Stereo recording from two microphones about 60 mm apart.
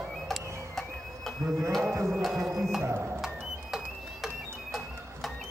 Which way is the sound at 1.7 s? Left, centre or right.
Centre.